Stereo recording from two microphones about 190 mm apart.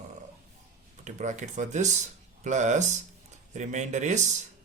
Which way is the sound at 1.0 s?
40° right (ahead or behind).